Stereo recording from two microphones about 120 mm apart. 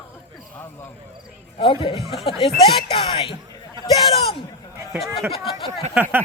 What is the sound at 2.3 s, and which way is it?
Speech, 45° left (ahead or behind).